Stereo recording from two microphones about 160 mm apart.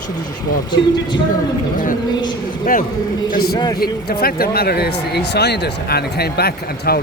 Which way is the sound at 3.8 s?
70° left (ahead or behind).